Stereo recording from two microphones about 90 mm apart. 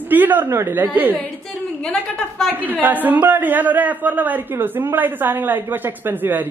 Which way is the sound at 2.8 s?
20° right (ahead or behind).